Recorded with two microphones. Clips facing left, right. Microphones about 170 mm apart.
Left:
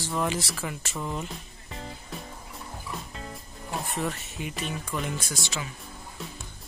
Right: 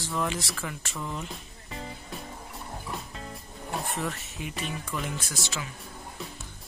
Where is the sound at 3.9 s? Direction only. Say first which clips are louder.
Left 2 dB; centre (ahead or behind).